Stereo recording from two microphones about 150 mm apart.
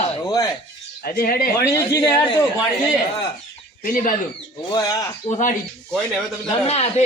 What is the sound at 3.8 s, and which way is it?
Speech, 65° left (ahead or behind).